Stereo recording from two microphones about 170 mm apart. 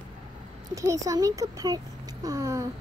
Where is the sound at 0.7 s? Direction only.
20° right (ahead or behind).